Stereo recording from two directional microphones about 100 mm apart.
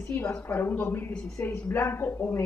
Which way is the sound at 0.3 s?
20° left (ahead or behind).